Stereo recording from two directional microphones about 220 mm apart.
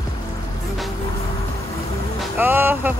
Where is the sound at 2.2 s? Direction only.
10° right (ahead or behind).